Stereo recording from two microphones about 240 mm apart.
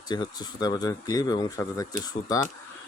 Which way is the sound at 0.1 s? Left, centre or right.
Centre.